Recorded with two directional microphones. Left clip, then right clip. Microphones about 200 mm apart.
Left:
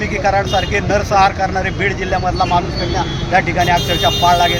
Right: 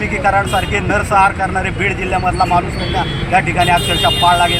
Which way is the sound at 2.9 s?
5° right (ahead or behind).